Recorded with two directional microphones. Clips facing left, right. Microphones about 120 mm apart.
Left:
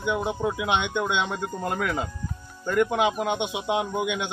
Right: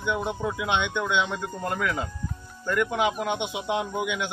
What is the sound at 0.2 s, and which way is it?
Speech, 10° left (ahead or behind).